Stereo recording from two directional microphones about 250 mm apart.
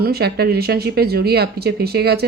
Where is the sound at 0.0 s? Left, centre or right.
Right.